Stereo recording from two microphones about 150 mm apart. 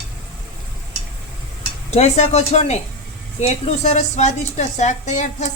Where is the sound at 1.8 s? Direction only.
45° left (ahead or behind).